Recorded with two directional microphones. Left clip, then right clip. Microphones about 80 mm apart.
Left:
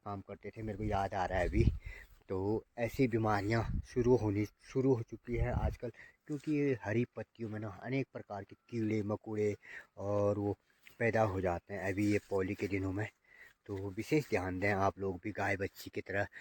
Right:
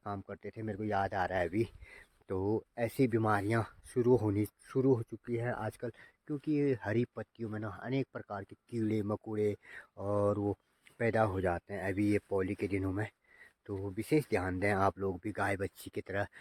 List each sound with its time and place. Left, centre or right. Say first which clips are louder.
0.0 s speech: right 3 dB; right; by 1.7 s centre
1.9 s a sound: right 1 dB; centre
2.4 s speech: right 2 dB; right
10.9 s speech: right 1 dB; right